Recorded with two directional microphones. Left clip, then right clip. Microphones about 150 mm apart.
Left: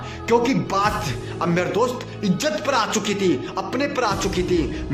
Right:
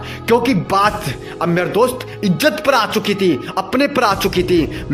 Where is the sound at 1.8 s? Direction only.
45° right (ahead or behind).